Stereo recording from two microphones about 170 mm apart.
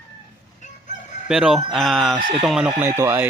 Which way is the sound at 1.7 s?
Centre (ahead or behind).